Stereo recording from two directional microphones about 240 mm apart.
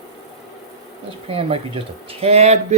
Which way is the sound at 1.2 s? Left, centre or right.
Right.